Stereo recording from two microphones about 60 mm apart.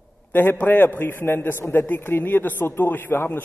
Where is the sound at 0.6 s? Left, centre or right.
Left.